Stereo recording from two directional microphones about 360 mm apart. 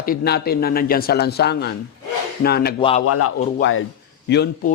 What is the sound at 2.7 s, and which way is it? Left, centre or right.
Speech, centre.